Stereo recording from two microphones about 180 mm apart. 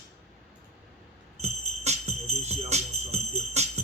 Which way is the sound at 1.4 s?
35° right (ahead or behind).